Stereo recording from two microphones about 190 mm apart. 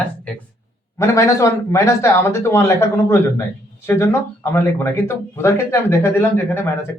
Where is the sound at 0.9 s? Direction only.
15° left (ahead or behind).